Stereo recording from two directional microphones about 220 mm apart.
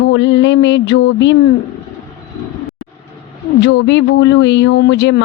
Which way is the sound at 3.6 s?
55° left (ahead or behind).